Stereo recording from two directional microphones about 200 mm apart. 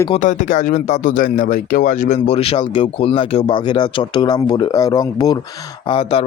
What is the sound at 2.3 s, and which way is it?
Speech, 30° left (ahead or behind).